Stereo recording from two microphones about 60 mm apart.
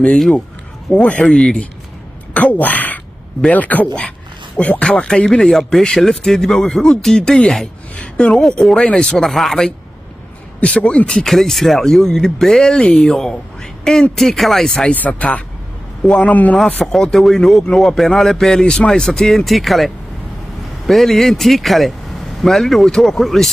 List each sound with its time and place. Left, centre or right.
0.9 s speech: left
1.2 s speech: centre
2.3 s a woman's voice: left
8.4 s speech: centre
10.6 s speech: centre
11.1 s a man's voice: centre
14.9 s speech: left
16.0 s a man's voice: centre
16.3 s speech: left
16.8 s a man's voice: centre